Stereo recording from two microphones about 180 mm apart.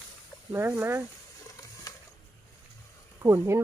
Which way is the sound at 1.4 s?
20° left (ahead or behind).